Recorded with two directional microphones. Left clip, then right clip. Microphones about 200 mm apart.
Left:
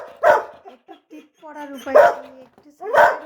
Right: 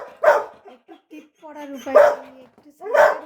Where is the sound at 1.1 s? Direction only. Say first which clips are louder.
Left 1 dB; centre (ahead or behind).